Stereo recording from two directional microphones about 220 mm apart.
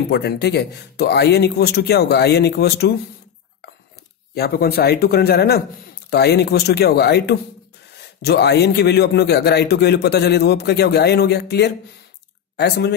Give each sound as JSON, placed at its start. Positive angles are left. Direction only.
{"t": 0.1, "sound": "a man's voice", "side_deg": 45}
{"t": 4.4, "sound": "a man's voice", "side_deg": 45}